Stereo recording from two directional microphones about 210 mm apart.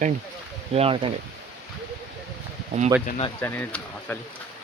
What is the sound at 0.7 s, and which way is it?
Speech, 25° right (ahead or behind).